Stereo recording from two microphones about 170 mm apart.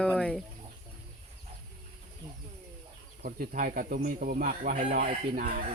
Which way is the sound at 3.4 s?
60° right (ahead or behind).